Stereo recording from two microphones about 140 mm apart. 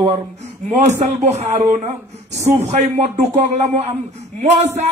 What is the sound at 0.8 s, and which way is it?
A man's voice, 55° right (ahead or behind).